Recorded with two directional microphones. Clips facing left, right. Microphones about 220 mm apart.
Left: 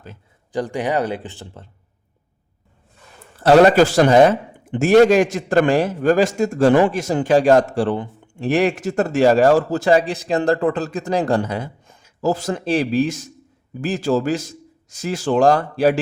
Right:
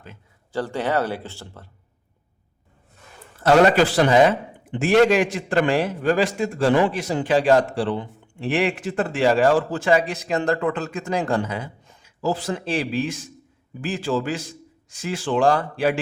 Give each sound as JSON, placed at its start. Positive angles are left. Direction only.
{"t": 0.5, "sound": "speech", "side_deg": 15}
{"t": 3.4, "sound": "a man's voice", "side_deg": 35}